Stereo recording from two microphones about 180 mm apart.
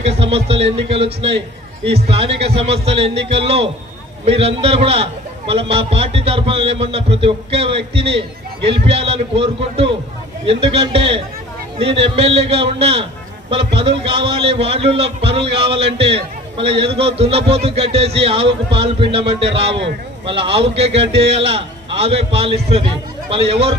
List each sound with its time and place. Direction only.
0.0 s a man's voice: 35° right (ahead or behind)